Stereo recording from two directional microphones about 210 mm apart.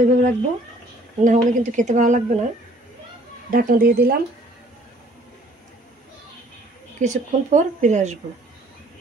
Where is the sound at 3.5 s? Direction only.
45° right (ahead or behind).